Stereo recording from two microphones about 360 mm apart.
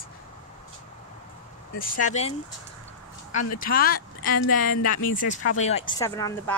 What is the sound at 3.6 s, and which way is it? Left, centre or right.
Speech, left.